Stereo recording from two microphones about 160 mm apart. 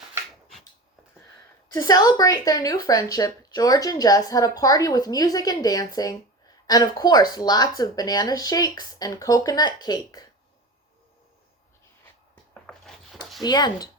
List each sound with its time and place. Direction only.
1.7 s a woman's voice: 25° left (ahead or behind)
12.6 s a sound: 5° left (ahead or behind)
13.4 s a woman's voice: 25° left (ahead or behind)